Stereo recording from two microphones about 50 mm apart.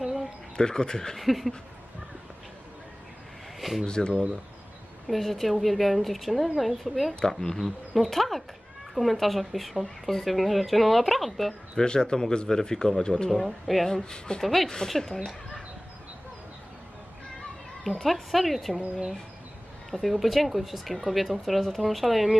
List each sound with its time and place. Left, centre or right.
0.0 s bird: centre
0.5 s a man's voice: centre
1.2 s speech: centre
3.6 s speech: centre
3.8 s a man's voice: centre
5.0 s speech: centre
7.2 s speech: centre
11.8 s a man's voice: centre
13.3 s speech: centre
13.8 s a man's voice: centre
14.4 s a man's voice: centre
17.8 s speech: centre
18.8 s speech: centre
19.9 s speech: centre